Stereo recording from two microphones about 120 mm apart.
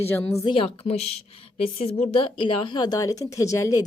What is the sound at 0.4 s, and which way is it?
A woman's voice, 50° left (ahead or behind).